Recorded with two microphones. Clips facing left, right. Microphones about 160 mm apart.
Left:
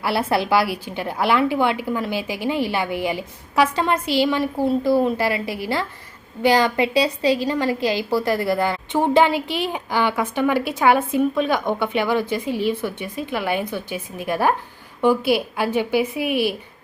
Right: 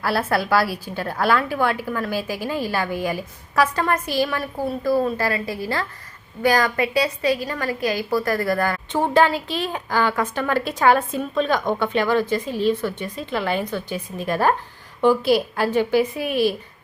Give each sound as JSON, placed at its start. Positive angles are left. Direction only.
{"t": 0.2, "sound": "a woman's voice", "side_deg": 20}
{"t": 16.3, "sound": "speech", "side_deg": 65}